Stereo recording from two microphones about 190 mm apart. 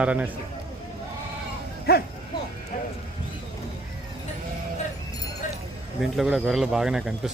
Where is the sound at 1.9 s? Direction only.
55° left (ahead or behind).